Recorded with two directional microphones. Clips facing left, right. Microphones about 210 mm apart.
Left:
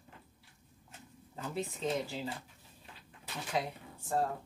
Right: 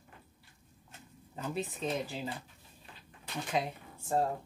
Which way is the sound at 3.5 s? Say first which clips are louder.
Right 1 dB; 20° right (ahead or behind).